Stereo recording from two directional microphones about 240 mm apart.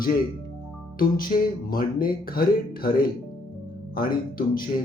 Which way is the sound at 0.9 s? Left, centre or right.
Left.